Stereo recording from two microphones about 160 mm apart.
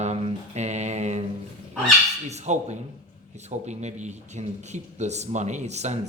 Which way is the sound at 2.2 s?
45° right (ahead or behind).